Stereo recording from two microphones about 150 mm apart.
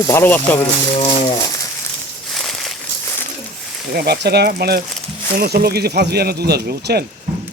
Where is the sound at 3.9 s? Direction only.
90° right.